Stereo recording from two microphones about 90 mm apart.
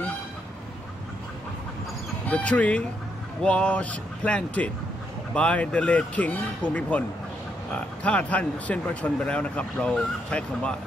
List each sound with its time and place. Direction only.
2.2 s speech: 15° left (ahead or behind)